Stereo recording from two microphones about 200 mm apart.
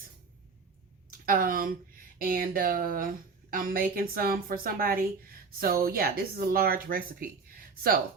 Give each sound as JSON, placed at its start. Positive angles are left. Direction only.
{"t": 1.2, "sound": "a woman's voice", "side_deg": -45}